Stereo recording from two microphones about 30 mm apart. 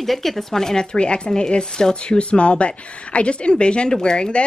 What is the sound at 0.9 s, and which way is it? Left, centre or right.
Speech, left.